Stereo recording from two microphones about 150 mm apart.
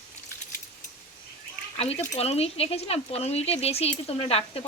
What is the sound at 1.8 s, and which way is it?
Speech, 45° left (ahead or behind).